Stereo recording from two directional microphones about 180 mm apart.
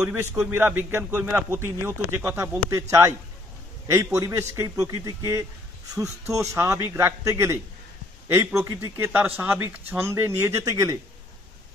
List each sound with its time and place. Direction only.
0.0 s a man's voice: 10° right (ahead or behind)